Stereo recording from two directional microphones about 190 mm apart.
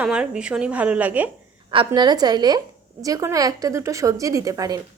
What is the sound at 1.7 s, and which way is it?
A woman's voice, 25° right (ahead or behind).